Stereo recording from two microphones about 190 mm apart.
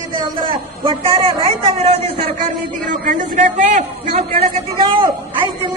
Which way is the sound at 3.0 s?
45° right (ahead or behind).